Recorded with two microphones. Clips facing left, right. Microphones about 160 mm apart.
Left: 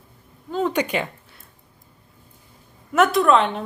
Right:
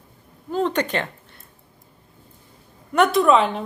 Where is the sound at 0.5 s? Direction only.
10° left (ahead or behind).